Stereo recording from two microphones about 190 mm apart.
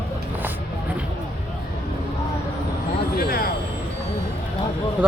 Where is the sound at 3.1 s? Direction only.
50° left (ahead or behind).